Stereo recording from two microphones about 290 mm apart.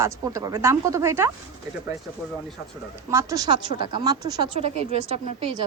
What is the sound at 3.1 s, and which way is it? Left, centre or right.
A woman's voice, centre.